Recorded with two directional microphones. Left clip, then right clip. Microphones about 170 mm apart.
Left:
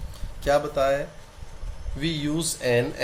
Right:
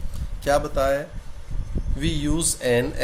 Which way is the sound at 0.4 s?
25° right (ahead or behind).